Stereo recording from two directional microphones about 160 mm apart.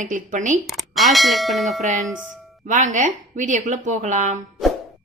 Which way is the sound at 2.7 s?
50° right (ahead or behind).